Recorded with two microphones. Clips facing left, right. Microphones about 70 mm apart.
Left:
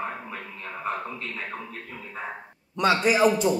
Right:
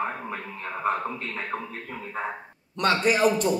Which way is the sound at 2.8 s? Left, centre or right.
Centre.